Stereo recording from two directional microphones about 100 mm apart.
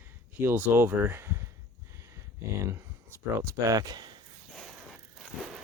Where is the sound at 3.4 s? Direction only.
30° right (ahead or behind).